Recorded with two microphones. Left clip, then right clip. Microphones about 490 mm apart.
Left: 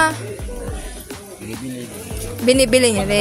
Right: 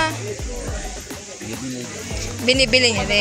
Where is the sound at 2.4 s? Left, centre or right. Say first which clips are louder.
Left 2 dB; left.